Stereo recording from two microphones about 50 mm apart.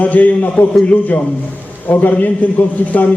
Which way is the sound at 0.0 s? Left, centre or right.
Left.